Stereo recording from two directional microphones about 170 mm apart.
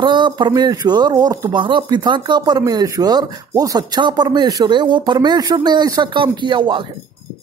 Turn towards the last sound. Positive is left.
turn(degrees=-25)  # may be behind; listen again after turning